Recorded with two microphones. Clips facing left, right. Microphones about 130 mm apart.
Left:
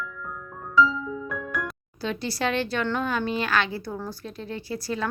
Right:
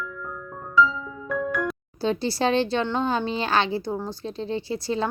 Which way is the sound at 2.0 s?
30° right (ahead or behind).